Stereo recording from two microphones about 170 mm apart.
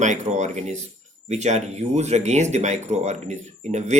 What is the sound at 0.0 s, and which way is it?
Speech, 45° right (ahead or behind).